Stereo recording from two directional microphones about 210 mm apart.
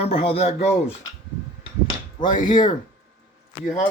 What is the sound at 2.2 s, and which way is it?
Speech, 40° left (ahead or behind).